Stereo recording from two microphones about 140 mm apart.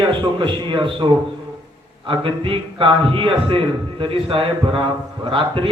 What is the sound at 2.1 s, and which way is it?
A man's voice, 40° right (ahead or behind).